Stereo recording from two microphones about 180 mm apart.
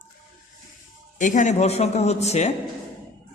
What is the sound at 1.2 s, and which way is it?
A man's voice, 45° left (ahead or behind).